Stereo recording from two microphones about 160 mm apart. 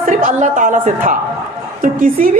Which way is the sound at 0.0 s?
55° right (ahead or behind).